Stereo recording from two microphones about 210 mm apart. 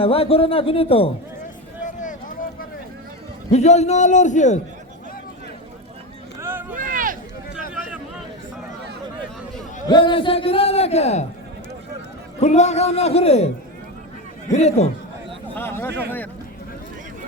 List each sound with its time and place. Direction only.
0.0 s a man's voice: 25° left (ahead or behind)
1.8 s a sound: 35° left (ahead or behind)
3.5 s a man's voice: 30° left (ahead or behind)
6.4 s vehicle: 10° right (ahead or behind)
6.7 s a sound: 40° right (ahead or behind)
9.8 s a man's voice: 20° left (ahead or behind)
12.4 s a man's voice: 35° left (ahead or behind)
14.5 s a man's voice: 30° left (ahead or behind)
15.5 s speech: 10° left (ahead or behind)